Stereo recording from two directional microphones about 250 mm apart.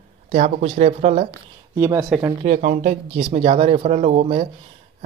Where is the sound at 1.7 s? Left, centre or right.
Centre.